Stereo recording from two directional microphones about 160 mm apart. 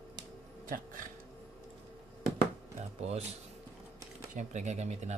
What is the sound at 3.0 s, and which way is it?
Speech, 40° right (ahead or behind).